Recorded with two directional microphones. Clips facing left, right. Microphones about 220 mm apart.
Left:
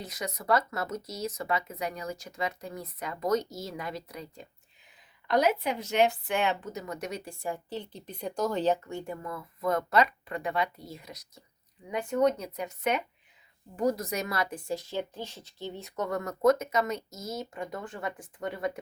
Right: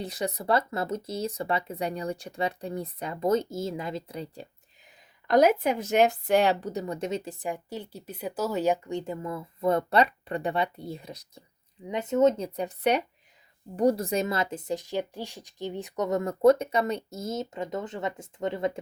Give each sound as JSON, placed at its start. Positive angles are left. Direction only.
{"t": 0.0, "sound": "speech", "side_deg": -30}
{"t": 5.3, "sound": "speech", "side_deg": -45}